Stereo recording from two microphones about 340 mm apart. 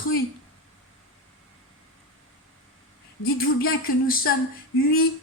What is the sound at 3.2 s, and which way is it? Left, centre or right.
Speech, left.